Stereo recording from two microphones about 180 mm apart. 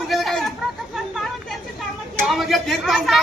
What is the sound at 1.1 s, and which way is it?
Chatter, centre (ahead or behind).